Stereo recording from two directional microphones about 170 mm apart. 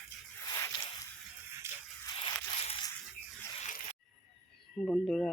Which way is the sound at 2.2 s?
35° left (ahead or behind).